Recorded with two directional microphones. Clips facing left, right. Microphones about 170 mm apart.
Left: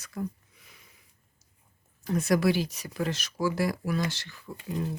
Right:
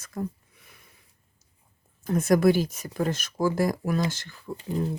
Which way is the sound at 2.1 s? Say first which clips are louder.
Right 4 dB; 50° right (ahead or behind).